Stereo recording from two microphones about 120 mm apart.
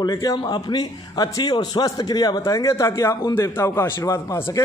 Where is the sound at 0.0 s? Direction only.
30° left (ahead or behind).